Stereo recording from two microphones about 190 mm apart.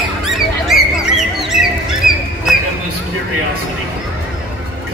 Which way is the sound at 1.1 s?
Centre (ahead or behind).